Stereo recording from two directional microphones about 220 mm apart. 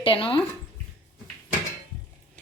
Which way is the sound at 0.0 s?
25° left (ahead or behind).